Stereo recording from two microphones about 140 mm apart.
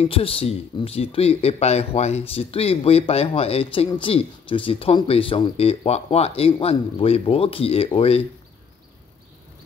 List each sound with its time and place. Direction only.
0.0 s speech: 40° left (ahead or behind)